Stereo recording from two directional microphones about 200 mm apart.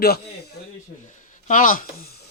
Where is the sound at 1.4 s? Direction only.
40° left (ahead or behind).